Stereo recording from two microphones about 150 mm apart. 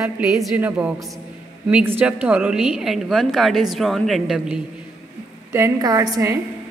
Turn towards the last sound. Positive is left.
turn(degrees=-20)  # may be behind; listen again after turning